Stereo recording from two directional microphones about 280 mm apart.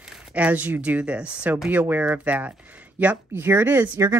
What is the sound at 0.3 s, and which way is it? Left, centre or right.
Speech, centre.